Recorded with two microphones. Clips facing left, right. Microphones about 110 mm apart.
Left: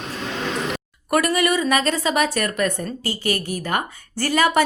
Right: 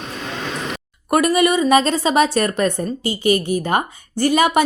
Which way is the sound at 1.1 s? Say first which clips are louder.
Right 4 dB; 20° right (ahead or behind).